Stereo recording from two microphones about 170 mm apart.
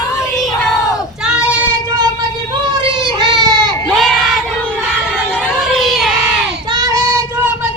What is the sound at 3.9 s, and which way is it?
Crowd, centre (ahead or behind).